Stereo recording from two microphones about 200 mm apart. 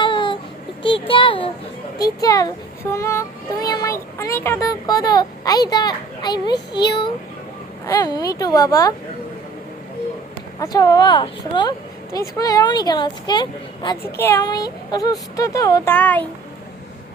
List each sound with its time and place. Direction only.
0.0 s a sound: 25° left (ahead or behind)
0.8 s a child's voice: 25° left (ahead or behind)
10.6 s speech: 15° left (ahead or behind)